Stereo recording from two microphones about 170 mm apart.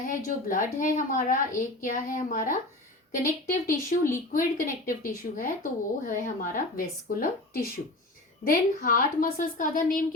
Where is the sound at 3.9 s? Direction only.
50° left (ahead or behind).